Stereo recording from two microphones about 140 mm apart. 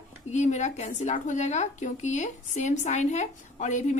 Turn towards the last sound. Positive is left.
turn(degrees=60)  # may be behind; listen again after turning